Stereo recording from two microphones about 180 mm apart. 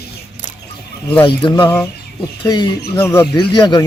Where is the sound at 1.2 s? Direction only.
25° left (ahead or behind).